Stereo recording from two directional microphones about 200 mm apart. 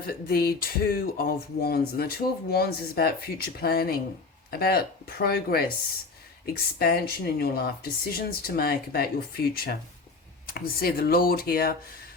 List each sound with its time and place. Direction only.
0.0 s speech: 50° left (ahead or behind)